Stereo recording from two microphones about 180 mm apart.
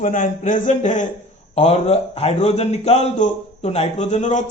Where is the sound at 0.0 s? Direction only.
45° left (ahead or behind).